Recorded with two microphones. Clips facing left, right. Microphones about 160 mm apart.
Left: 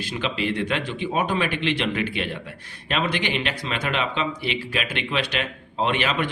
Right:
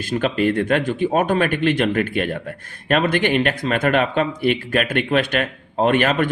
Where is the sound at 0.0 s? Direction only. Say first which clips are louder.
Right 8 dB; 50° right (ahead or behind).